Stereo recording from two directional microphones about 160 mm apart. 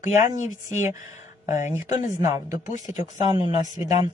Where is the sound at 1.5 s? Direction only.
50° left (ahead or behind).